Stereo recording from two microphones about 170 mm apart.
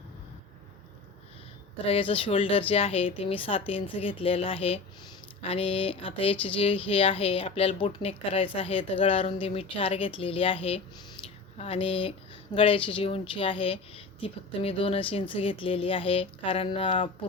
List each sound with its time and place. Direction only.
1.9 s a woman's voice: 30° left (ahead or behind)